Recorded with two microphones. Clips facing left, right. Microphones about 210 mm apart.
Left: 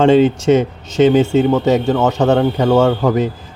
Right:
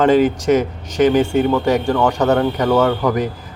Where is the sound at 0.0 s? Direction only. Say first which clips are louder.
Left 3 dB; 25° left (ahead or behind).